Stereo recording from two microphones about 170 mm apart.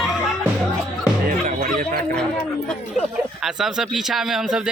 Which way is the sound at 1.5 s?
55° right (ahead or behind).